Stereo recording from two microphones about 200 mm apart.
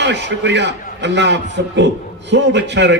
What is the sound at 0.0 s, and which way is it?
A man's voice, 60° right (ahead or behind).